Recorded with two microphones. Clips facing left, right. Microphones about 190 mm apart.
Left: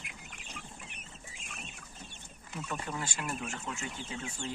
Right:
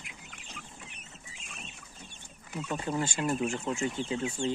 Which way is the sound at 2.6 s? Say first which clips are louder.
Right 7 dB; 30° right (ahead or behind).